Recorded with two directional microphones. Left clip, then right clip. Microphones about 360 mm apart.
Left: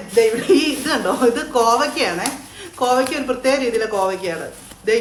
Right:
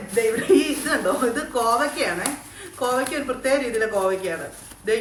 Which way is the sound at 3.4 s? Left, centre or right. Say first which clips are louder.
Left 4 dB; centre.